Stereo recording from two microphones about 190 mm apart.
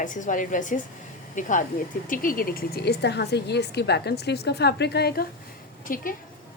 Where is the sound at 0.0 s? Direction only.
45° left (ahead or behind).